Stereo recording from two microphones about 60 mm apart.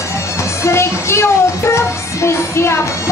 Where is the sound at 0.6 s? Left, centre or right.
Left.